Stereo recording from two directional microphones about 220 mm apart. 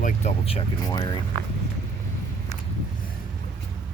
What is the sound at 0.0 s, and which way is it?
Speech, 30° left (ahead or behind).